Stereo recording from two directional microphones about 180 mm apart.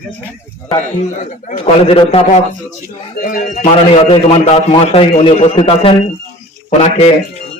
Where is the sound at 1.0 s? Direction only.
45° left (ahead or behind).